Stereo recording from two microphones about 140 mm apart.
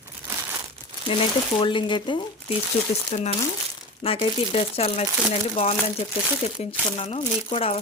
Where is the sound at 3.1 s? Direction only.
55° left (ahead or behind).